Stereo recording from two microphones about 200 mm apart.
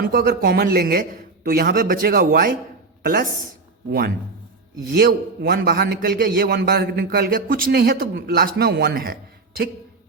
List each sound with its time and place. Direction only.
0.1 s a man's voice: 45° right (ahead or behind)
4.9 s a man's voice: 50° right (ahead or behind)